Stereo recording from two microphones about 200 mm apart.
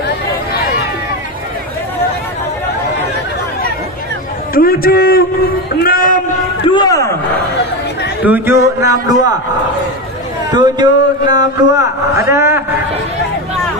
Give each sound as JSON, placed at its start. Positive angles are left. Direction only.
{"t": 4.6, "sound": "a man's voice", "side_deg": 50}
{"t": 6.6, "sound": "speech", "side_deg": 20}
{"t": 8.2, "sound": "speech", "side_deg": -10}
{"t": 10.5, "sound": "speech", "side_deg": -20}